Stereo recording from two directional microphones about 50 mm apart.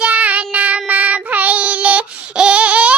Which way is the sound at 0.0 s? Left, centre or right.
Right.